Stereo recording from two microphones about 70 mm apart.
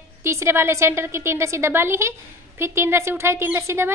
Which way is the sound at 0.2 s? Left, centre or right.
Right.